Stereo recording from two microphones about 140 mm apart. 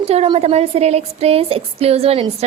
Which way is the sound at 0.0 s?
50° right (ahead or behind).